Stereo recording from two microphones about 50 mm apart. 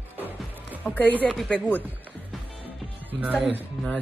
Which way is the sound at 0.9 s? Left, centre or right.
Left.